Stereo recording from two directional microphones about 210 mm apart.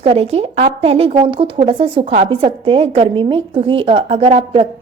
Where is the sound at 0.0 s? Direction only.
30° right (ahead or behind).